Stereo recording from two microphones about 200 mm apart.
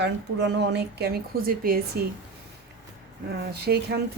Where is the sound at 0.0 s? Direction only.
60° right (ahead or behind).